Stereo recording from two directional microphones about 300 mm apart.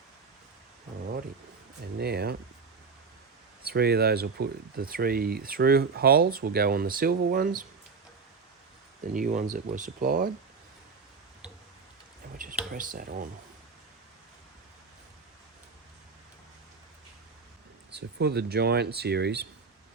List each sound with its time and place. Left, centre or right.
2.0 s speech: right
3.7 s speech: right
9.1 s speech: right
12.7 s speech: right
17.9 s speech: right